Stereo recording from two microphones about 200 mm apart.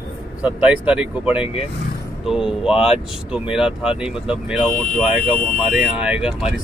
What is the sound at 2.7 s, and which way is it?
Speech, 30° left (ahead or behind).